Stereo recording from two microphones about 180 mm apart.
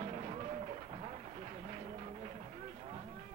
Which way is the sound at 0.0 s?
35° right (ahead or behind).